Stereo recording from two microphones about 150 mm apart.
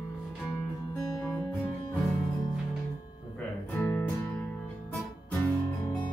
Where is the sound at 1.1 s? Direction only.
25° left (ahead or behind).